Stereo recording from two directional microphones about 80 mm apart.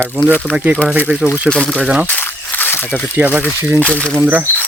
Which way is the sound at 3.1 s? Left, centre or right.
Right.